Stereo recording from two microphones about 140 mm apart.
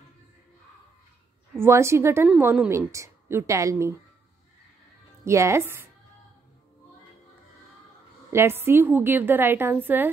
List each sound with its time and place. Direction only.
1.6 s a woman's voice: 20° right (ahead or behind)
2.2 s a woman's voice: 10° right (ahead or behind)
2.7 s a woman's voice: 20° right (ahead or behind)
5.2 s a woman's voice: 20° right (ahead or behind)
8.3 s a woman's voice: 20° right (ahead or behind)